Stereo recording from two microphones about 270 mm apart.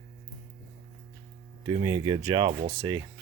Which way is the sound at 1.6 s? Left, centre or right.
Centre.